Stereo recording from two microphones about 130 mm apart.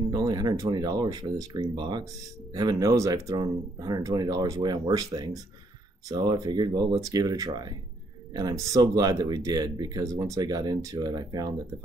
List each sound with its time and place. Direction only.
0.1 s speech: 30° right (ahead or behind)